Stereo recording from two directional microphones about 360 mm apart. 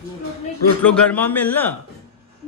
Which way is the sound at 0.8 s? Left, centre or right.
Centre.